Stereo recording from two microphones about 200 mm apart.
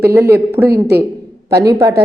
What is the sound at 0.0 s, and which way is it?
A woman's voice, 10° right (ahead or behind).